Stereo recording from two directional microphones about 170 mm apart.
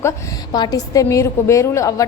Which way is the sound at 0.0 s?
20° left (ahead or behind).